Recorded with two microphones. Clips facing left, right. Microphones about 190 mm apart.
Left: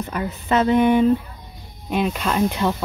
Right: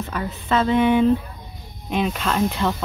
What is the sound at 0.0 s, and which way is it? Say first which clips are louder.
Speech: left 2 dB; 15° left (ahead or behind).